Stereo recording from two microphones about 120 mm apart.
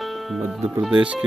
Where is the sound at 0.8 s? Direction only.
10° right (ahead or behind).